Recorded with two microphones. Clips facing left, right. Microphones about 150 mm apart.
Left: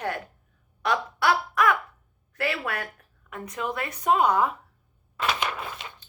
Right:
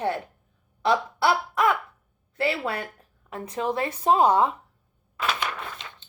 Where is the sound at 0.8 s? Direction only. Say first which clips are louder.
Right 2 dB; 25° right (ahead or behind).